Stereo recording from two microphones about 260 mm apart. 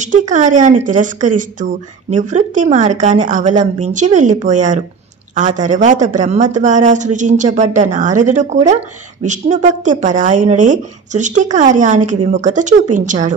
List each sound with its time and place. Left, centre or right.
0.3 s a woman's voice: right